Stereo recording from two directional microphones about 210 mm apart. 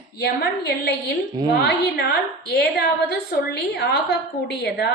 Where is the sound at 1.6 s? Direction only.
50° left (ahead or behind).